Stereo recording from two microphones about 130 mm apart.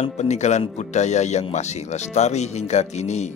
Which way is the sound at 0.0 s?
60° left (ahead or behind).